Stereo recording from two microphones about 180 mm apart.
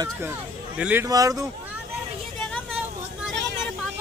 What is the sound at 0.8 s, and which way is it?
Speech, 10° right (ahead or behind).